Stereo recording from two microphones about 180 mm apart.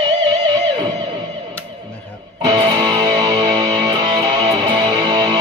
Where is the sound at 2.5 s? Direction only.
25° right (ahead or behind).